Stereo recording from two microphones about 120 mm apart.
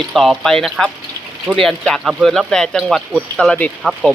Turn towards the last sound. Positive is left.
turn(degrees=-5)  # may be behind; listen again after turning